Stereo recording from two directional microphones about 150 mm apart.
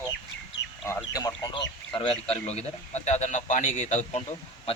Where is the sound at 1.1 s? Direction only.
25° left (ahead or behind); by 4.2 s 55° left (ahead or behind).